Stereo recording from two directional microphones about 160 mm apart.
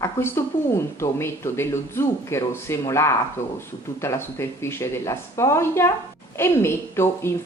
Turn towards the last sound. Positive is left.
turn(degrees=15)  # may be behind; listen again after turning